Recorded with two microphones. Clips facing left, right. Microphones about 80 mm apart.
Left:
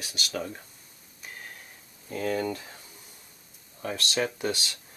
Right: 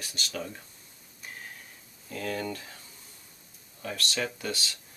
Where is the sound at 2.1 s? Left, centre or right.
Centre.